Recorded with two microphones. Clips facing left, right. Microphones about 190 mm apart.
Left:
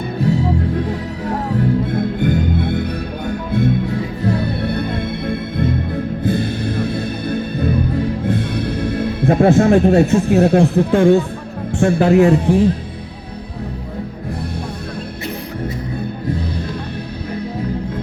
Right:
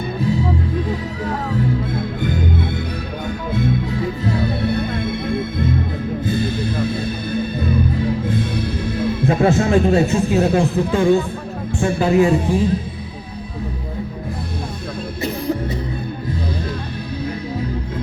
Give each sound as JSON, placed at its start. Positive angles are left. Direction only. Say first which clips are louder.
{"t": 0.2, "sound": "music", "louder": "left 3 dB", "side_deg": 65}
{"t": 11.7, "sound": "a man's voice", "louder": "left 4 dB", "side_deg": 65}